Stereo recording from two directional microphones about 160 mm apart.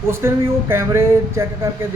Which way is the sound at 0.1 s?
15° right (ahead or behind).